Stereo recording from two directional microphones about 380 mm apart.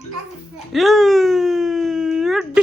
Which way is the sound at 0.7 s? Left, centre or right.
Centre.